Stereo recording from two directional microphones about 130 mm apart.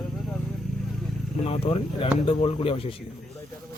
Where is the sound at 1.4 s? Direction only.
45° left (ahead or behind).